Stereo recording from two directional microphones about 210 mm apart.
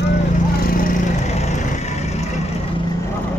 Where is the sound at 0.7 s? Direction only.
40° left (ahead or behind).